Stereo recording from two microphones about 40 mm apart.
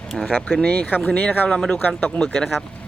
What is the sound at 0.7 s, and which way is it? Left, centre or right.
Speech, left.